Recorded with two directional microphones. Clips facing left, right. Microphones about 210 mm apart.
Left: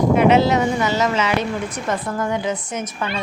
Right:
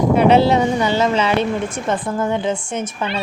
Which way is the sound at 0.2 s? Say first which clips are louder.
Right 3 dB; 30° right (ahead or behind).